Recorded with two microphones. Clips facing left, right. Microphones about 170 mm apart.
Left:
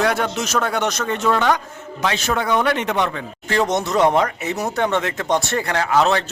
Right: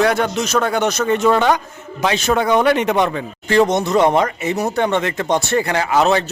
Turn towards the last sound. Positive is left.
turn(degrees=-10)  # may be behind; listen again after turning